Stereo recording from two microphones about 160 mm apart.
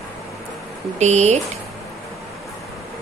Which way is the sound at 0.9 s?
45° right (ahead or behind).